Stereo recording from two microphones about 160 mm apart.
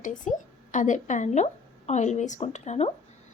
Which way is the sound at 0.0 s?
50° left (ahead or behind).